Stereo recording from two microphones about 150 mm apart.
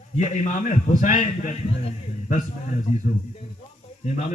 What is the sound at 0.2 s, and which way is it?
A man's voice, 50° left (ahead or behind).